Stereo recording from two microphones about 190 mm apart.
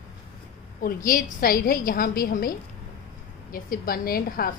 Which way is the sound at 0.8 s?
45° left (ahead or behind).